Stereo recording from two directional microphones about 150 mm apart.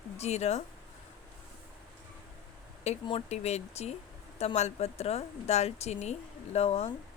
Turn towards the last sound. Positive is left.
turn(degrees=45)  # may be behind; listen again after turning